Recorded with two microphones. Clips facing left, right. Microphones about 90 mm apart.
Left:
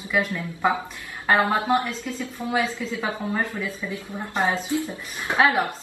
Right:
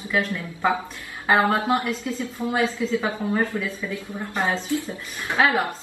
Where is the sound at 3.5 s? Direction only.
20° left (ahead or behind).